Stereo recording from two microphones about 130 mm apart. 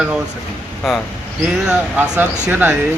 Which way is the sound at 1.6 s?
10° right (ahead or behind).